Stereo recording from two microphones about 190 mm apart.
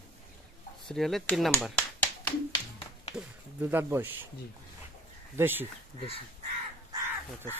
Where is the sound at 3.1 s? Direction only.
10° right (ahead or behind).